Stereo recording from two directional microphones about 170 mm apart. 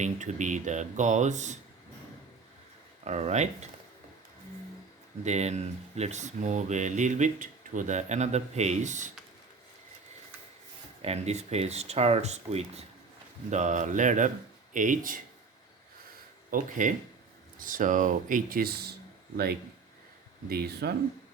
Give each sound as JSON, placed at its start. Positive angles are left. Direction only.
{"t": 0.0, "sound": "speech", "side_deg": -45}
{"t": 3.0, "sound": "speech", "side_deg": -40}
{"t": 5.2, "sound": "speech", "side_deg": -40}
{"t": 11.0, "sound": "speech", "side_deg": -40}
{"t": 16.5, "sound": "speech", "side_deg": -50}
{"t": 20.5, "sound": "speech", "side_deg": -65}